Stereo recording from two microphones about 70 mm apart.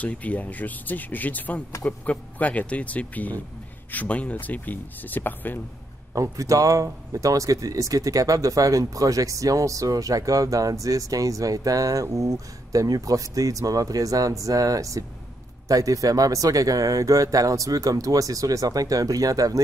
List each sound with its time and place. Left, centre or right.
0.0 s speech: left
6.1 s speech: right